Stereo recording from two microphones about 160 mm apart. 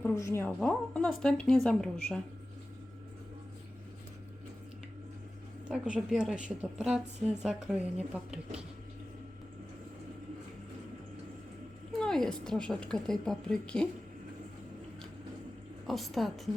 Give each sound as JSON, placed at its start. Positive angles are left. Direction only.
{"t": 0.0, "sound": "a woman's voice", "side_deg": 20}
{"t": 0.6, "sound": "a woman's voice", "side_deg": 5}
{"t": 5.6, "sound": "a woman's voice", "side_deg": -5}
{"t": 11.9, "sound": "a woman's voice", "side_deg": 5}
{"t": 15.9, "sound": "a woman's voice", "side_deg": 0}